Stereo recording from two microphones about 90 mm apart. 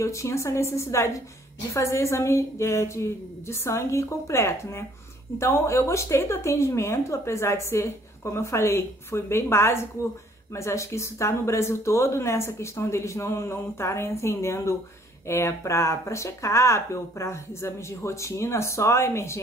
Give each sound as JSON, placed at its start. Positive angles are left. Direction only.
{"t": 0.0, "sound": "speech", "side_deg": 35}